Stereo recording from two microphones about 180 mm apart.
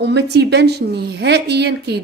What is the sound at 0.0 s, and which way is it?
A woman's voice, 70° right (ahead or behind).